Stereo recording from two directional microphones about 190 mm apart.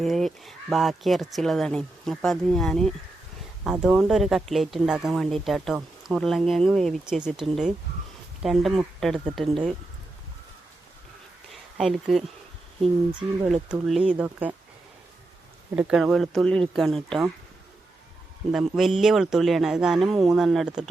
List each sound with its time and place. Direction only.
0.0 s speech: centre (ahead or behind)
11.8 s speech: centre (ahead or behind)
15.7 s speech: 5° right (ahead or behind)
18.5 s speech: centre (ahead or behind)